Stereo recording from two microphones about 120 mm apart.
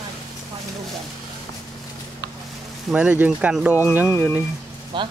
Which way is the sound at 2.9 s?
10° right (ahead or behind).